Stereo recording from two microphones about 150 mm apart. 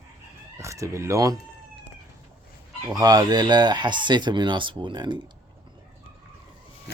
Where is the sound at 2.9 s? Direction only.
25° right (ahead or behind).